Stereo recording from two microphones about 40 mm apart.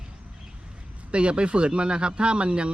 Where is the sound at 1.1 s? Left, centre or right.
Right.